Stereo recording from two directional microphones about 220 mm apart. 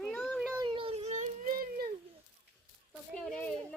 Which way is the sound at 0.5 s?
20° right (ahead or behind).